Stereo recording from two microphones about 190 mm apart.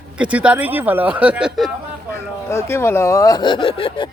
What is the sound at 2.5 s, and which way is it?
Speech, 15° left (ahead or behind).